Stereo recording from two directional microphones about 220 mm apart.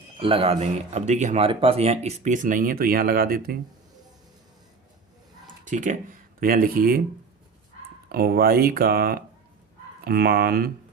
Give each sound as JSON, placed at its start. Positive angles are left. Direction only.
{"t": 0.2, "sound": "speech", "side_deg": -25}
{"t": 5.6, "sound": "speech", "side_deg": -35}
{"t": 8.1, "sound": "speech", "side_deg": -45}